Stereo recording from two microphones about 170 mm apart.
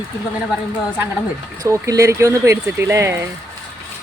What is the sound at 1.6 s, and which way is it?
Speech, 20° right (ahead or behind).